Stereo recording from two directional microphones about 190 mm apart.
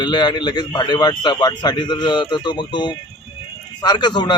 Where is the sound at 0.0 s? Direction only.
25° left (ahead or behind).